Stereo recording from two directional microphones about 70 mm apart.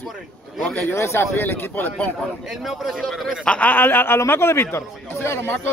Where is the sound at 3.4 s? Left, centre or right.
Centre; by 5.5 s left.